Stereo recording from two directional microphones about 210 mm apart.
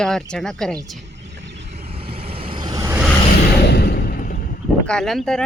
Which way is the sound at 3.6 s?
50° left (ahead or behind).